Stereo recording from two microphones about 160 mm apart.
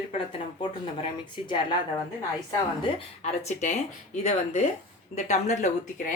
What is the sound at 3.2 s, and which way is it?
A woman's voice, 45° left (ahead or behind).